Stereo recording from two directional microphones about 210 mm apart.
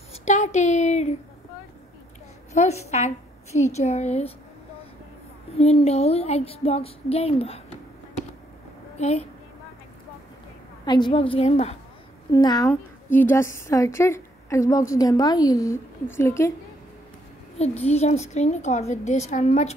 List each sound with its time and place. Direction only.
0.1 s a woman's voice: 35° left (ahead or behind)
2.5 s a woman's voice: 30° left (ahead or behind)
5.6 s speech: 30° left (ahead or behind)
8.9 s a woman's voice: 30° left (ahead or behind)
10.9 s speech: 20° left (ahead or behind)
12.3 s speech: 20° left (ahead or behind)
12.6 s speech: 10° left (ahead or behind)
17.6 s a woman's voice: 30° left (ahead or behind)